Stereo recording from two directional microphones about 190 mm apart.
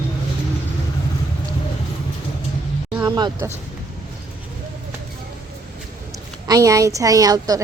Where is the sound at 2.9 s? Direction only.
20° right (ahead or behind).